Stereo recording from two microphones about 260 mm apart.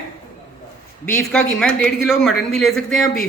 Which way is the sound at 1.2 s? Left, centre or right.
Centre.